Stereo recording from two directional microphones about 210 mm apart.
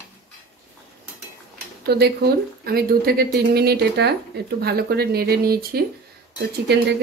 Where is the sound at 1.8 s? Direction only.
50° right (ahead or behind).